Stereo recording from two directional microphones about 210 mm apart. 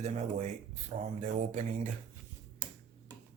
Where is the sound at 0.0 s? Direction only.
35° right (ahead or behind).